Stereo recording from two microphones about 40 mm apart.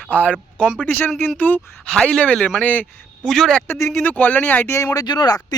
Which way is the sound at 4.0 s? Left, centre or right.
Left.